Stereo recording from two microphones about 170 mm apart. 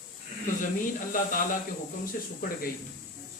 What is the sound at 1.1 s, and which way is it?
Speech, 55° left (ahead or behind).